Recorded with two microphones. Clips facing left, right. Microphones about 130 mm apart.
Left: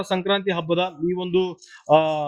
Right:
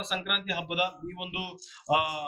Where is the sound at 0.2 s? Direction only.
90° left.